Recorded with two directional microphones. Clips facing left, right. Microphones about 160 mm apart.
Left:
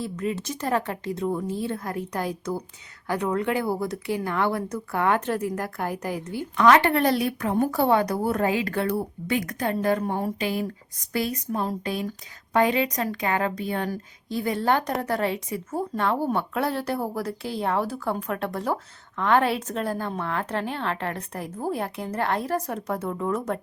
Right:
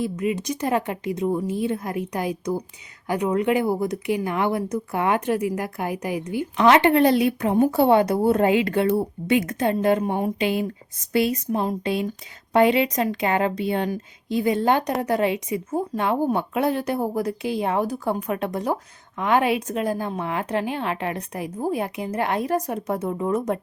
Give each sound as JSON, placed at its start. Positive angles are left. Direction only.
{"t": 0.0, "sound": "a woman's voice", "side_deg": -15}